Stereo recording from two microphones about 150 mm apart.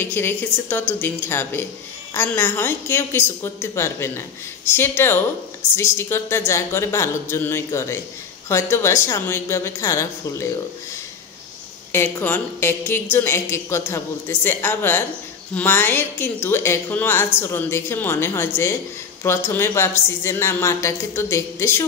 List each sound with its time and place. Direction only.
0.0 s speech: 15° left (ahead or behind)
11.9 s speech: 15° left (ahead or behind)